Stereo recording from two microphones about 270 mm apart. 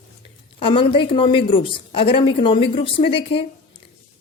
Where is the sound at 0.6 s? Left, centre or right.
Centre.